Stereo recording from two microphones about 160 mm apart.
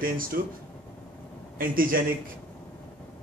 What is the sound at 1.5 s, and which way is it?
Speech, 65° right (ahead or behind).